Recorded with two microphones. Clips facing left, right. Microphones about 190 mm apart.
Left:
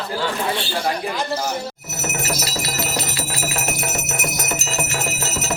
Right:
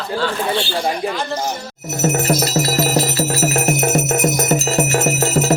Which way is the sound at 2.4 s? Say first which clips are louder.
Right 9 dB; 50° right (ahead or behind).